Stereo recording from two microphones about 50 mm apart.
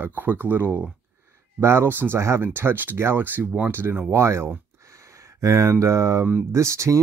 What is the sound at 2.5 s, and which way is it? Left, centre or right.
Speech, right.